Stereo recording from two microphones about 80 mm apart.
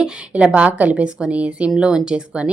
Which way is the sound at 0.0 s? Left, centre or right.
Centre.